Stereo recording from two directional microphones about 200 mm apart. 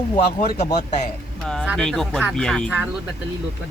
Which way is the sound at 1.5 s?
Centre (ahead or behind).